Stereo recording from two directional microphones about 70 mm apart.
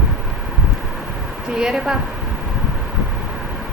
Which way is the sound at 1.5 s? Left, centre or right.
Centre.